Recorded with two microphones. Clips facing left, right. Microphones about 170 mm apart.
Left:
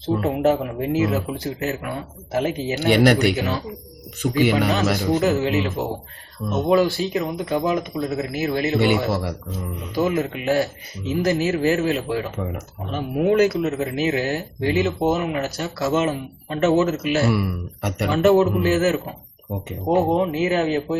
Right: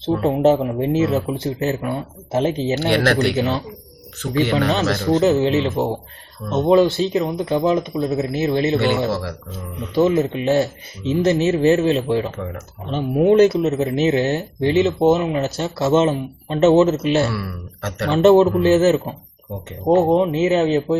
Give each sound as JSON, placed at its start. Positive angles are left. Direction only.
{"t": 0.2, "sound": "a man's voice", "side_deg": -25}
{"t": 2.9, "sound": "speech", "side_deg": 15}
{"t": 3.3, "sound": "a man's voice", "side_deg": -25}
{"t": 4.2, "sound": "speech", "side_deg": 10}
{"t": 5.2, "sound": "a man's voice", "side_deg": -25}
{"t": 8.8, "sound": "speech", "side_deg": 15}
{"t": 9.9, "sound": "a man's voice", "side_deg": -25}
{"t": 17.2, "sound": "speech", "side_deg": 15}
{"t": 18.1, "sound": "a man's voice", "side_deg": -25}
{"t": 20.0, "sound": "a man's voice", "side_deg": -25}